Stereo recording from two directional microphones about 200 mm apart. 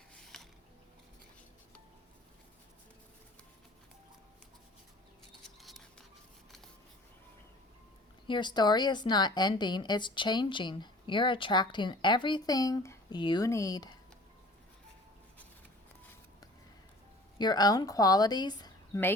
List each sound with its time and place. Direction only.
8.3 s a woman's voice: 20° left (ahead or behind)
17.3 s a woman's voice: 20° left (ahead or behind)